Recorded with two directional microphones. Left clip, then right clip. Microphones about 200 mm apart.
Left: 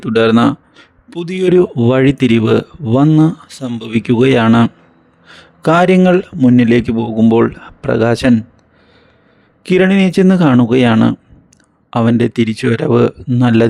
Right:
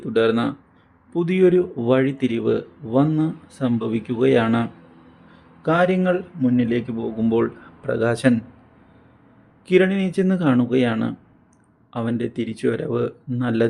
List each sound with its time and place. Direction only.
0.0 s speech: 45° left (ahead or behind)
9.6 s speech: 40° left (ahead or behind)